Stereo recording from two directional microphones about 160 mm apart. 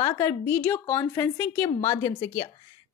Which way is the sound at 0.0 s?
15° left (ahead or behind).